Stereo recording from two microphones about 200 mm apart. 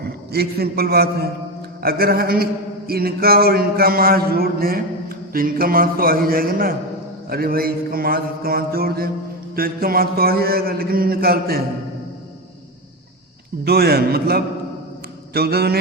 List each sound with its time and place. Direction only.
0.0 s a man's voice: 50° right (ahead or behind)
13.7 s a man's voice: 50° right (ahead or behind)